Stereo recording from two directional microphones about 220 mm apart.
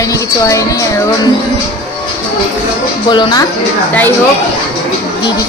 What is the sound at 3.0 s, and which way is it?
Speech, 20° left (ahead or behind).